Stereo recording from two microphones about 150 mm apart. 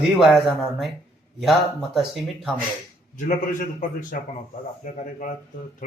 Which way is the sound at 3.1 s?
60° left (ahead or behind).